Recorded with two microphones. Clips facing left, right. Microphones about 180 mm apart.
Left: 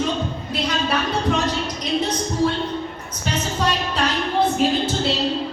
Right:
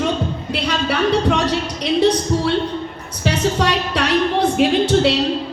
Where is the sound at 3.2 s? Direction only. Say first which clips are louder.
Right 5 dB; 75° right (ahead or behind).